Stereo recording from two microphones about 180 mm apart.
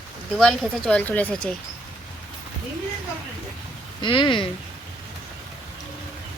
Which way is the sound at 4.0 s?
25° left (ahead or behind).